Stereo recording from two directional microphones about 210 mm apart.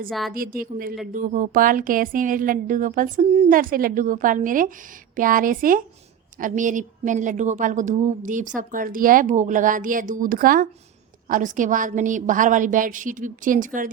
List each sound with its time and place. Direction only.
0.1 s a woman's voice: centre (ahead or behind)
0.3 s a woman's voice: 40° right (ahead or behind)